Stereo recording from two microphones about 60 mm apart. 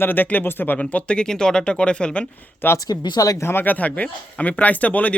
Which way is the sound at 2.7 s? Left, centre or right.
Left.